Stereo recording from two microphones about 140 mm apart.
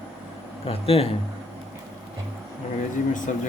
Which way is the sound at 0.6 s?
45° left (ahead or behind).